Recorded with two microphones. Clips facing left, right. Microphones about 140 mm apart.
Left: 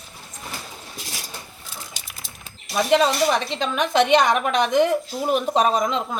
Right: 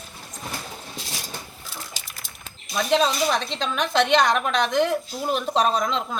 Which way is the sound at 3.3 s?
55° left (ahead or behind).